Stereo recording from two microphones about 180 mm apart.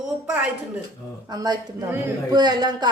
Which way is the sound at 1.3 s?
20° right (ahead or behind).